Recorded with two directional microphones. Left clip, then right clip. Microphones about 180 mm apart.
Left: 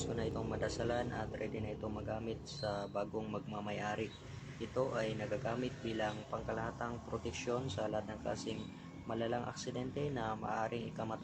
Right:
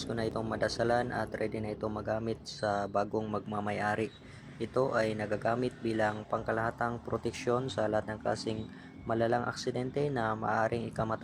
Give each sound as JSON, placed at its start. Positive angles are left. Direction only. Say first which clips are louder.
{"t": 0.2, "sound": "speech", "louder": "right 9 dB", "side_deg": -35}